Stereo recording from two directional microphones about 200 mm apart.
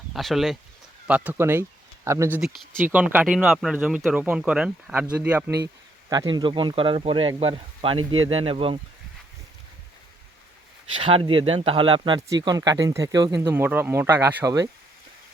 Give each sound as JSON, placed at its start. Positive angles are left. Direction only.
{"t": 0.1, "sound": "speech", "side_deg": 0}
{"t": 6.3, "sound": "speech", "side_deg": -25}
{"t": 10.9, "sound": "speech", "side_deg": -25}